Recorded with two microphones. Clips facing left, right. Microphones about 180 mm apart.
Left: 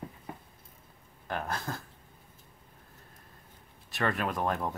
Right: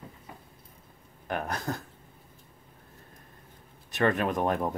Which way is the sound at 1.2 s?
20° right (ahead or behind).